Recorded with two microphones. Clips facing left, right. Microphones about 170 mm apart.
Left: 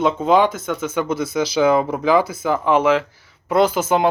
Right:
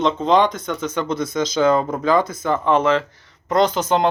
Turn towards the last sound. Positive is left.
turn(degrees=5)  # may be behind; listen again after turning